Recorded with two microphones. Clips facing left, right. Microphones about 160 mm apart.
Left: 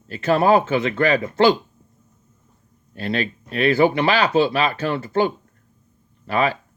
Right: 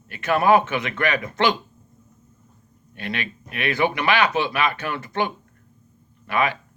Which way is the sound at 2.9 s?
35° left (ahead or behind).